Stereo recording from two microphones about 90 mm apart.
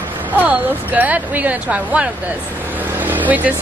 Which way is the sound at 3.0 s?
20° right (ahead or behind).